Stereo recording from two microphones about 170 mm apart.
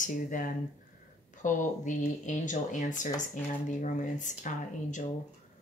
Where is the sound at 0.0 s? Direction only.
50° left (ahead or behind).